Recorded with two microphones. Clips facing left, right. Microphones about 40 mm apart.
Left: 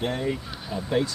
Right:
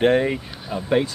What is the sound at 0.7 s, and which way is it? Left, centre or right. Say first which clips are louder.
Speech: right 5 dB; right.